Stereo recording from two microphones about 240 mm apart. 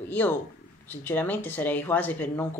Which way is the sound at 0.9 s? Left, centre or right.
Centre.